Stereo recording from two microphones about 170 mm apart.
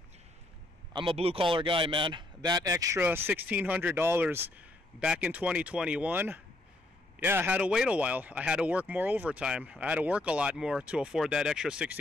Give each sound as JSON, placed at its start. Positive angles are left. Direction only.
{"t": 0.9, "sound": "a man's voice", "side_deg": -35}